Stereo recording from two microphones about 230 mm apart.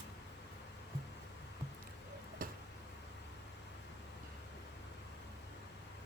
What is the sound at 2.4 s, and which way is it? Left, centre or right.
Tick-tock, right.